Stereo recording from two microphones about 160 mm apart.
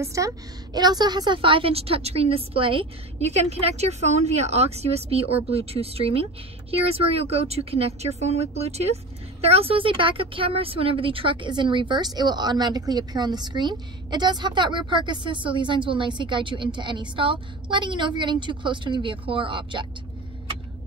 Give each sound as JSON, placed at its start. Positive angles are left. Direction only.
{"t": 0.0, "sound": "a woman's voice", "side_deg": -20}